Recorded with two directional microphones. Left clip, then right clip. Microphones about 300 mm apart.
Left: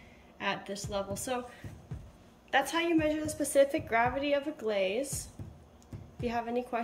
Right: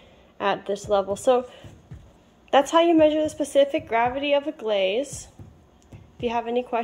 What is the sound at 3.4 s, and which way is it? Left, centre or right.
Speech, centre.